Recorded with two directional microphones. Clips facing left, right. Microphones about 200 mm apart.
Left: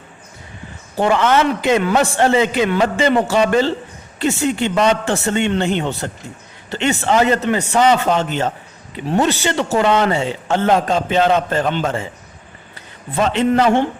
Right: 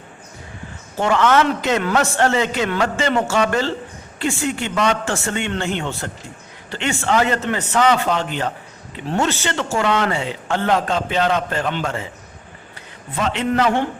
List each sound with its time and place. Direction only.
0.9 s a man's voice: 15° left (ahead or behind)
13.1 s a man's voice: 30° left (ahead or behind)